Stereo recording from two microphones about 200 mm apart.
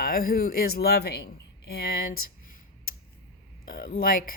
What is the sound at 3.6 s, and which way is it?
Speech, 45° left (ahead or behind).